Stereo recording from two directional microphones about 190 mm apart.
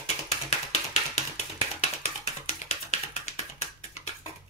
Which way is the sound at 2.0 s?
35° left (ahead or behind).